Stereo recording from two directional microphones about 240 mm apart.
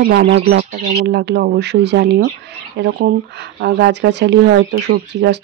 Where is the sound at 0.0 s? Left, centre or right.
Right.